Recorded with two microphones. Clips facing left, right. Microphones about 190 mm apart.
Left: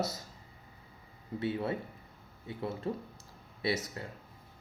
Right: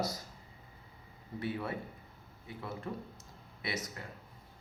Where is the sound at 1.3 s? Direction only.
25° left (ahead or behind).